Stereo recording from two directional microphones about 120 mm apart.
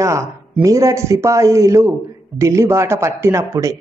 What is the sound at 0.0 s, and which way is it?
A woman's voice, 25° right (ahead or behind).